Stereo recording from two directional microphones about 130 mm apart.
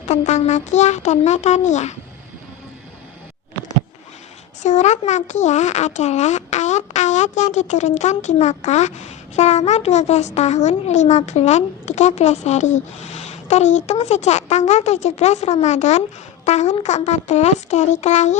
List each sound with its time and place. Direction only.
0.0 s speech: 60° left (ahead or behind)
4.6 s speech: 65° left (ahead or behind)